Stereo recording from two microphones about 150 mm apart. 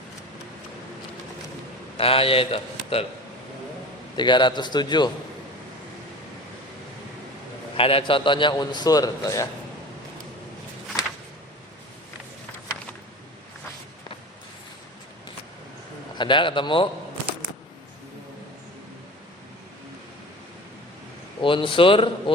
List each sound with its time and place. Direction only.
2.0 s a man's voice: 40° left (ahead or behind)
4.1 s a man's voice: 30° left (ahead or behind)
7.8 s a man's voice: 40° left (ahead or behind)
16.1 s a man's voice: 30° left (ahead or behind)
21.4 s a man's voice: 35° left (ahead or behind)